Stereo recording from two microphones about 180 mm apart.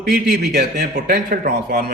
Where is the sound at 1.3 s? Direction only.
55° right (ahead or behind).